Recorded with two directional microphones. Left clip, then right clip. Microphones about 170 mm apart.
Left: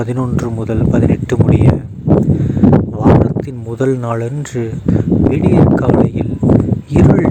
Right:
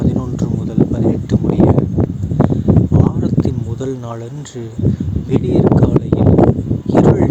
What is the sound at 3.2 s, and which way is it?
Speech, 40° left (ahead or behind).